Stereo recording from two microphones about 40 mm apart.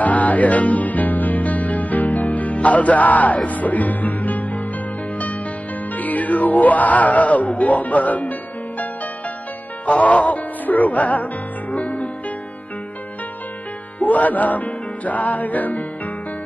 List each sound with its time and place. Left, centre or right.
0.0 s music: left
5.9 s music: left
13.9 s music: left